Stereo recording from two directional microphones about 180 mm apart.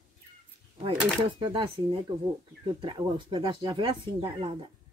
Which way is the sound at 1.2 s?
25° right (ahead or behind).